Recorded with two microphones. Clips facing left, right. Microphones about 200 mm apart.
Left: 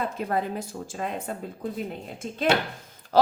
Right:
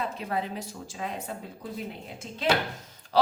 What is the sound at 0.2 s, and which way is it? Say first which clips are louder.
Speech: left 4 dB; 50° left (ahead or behind).